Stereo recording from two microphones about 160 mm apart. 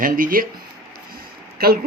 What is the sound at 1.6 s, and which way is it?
Speech, 70° right (ahead or behind).